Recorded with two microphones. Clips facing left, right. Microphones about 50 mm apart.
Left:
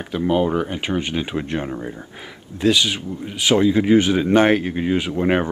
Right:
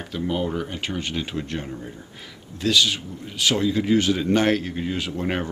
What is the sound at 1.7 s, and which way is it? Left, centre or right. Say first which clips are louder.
Speech: left 6 dB; left.